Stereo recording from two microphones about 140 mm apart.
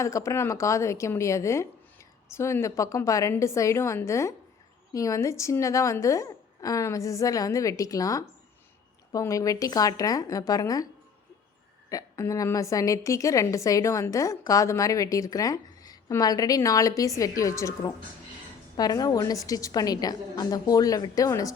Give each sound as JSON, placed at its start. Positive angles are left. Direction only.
{"t": 0.0, "sound": "a woman's voice", "side_deg": 20}
{"t": 11.9, "sound": "a woman's voice", "side_deg": 25}